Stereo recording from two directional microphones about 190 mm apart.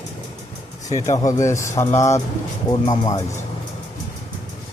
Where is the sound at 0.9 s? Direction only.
15° left (ahead or behind).